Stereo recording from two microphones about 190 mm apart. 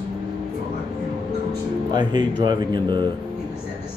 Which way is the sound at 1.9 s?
25° right (ahead or behind).